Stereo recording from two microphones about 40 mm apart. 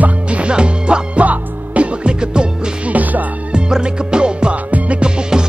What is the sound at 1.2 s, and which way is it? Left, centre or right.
Music, right.